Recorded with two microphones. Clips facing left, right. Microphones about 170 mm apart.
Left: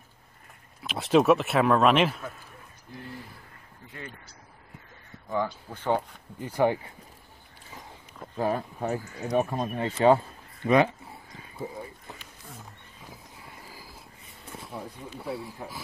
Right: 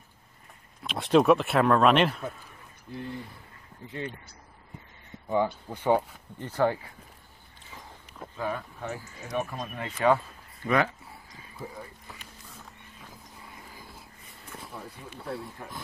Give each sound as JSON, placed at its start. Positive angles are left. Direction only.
{"t": 0.8, "sound": "speech", "side_deg": 0}
{"t": 5.7, "sound": "speech", "side_deg": -10}
{"t": 6.4, "sound": "speech", "side_deg": 15}
{"t": 8.4, "sound": "speech", "side_deg": 35}
{"t": 11.5, "sound": "a sound", "side_deg": 25}
{"t": 13.7, "sound": "a sound", "side_deg": 0}
{"t": 15.1, "sound": "speech", "side_deg": 0}